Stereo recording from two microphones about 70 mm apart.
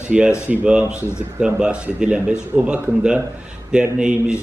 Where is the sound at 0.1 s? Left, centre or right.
Centre.